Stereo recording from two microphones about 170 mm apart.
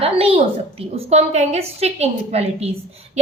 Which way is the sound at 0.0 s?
35° right (ahead or behind).